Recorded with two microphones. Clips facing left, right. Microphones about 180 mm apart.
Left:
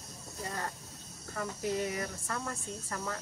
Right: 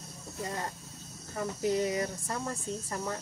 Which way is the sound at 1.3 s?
20° right (ahead or behind).